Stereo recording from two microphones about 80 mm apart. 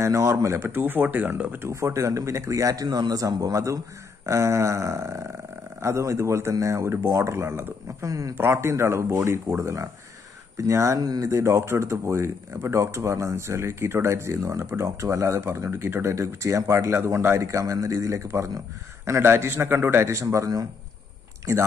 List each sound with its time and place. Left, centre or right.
0.0 s speech: right
1.7 s a man's voice: right
8.1 s a man's voice: right
8.4 s speech: right
11.0 s speech: right